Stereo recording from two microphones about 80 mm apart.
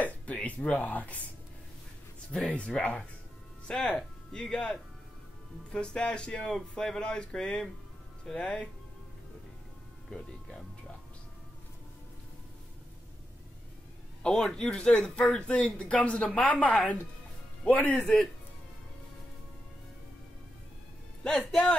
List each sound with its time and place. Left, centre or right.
0.3 s speech: centre
2.3 s speech: centre
10.0 s speech: centre
14.2 s speech: centre
21.2 s speech: centre